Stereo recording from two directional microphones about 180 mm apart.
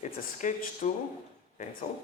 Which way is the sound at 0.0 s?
45° left (ahead or behind).